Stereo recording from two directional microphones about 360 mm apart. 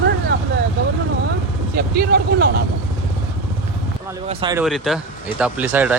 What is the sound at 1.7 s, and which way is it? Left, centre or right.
Speech, right.